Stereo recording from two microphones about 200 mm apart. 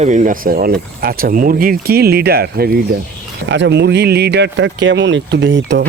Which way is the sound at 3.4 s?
60° right (ahead or behind).